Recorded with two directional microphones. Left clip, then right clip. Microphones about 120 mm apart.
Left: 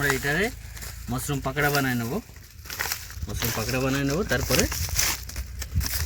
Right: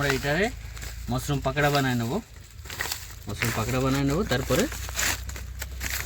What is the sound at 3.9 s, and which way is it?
Speech, 25° right (ahead or behind).